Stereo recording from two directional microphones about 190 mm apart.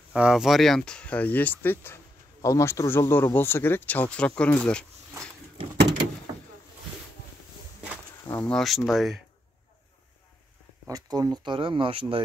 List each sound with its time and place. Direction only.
0.1 s speech: 5° right (ahead or behind)
8.3 s speech: 10° left (ahead or behind)
10.9 s speech: 20° right (ahead or behind)